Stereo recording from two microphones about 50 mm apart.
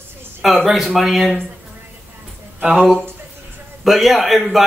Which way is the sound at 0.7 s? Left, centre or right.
Centre.